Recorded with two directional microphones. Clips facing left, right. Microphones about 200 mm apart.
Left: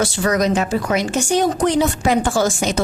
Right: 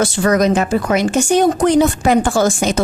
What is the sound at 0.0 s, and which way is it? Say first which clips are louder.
A woman's voice: right 4 dB; 55° right (ahead or behind).